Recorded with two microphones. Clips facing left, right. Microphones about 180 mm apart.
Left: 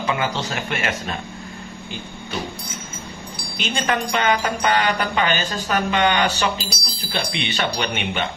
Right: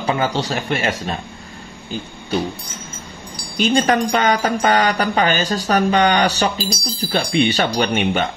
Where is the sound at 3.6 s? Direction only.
40° right (ahead or behind).